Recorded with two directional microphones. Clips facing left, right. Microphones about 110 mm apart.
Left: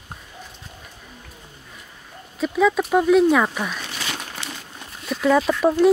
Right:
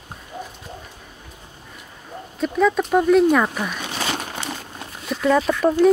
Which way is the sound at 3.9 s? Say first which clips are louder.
Right 5 dB; 40° right (ahead or behind).